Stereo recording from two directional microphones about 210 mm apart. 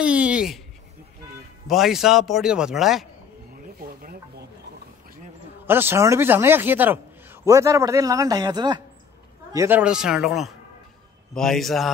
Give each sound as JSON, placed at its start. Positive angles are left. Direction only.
{"t": 0.0, "sound": "a sound", "side_deg": -5}
{"t": 1.7, "sound": "a man's voice", "side_deg": 0}
{"t": 3.8, "sound": "snake", "side_deg": -45}
{"t": 5.7, "sound": "a man's voice", "side_deg": -10}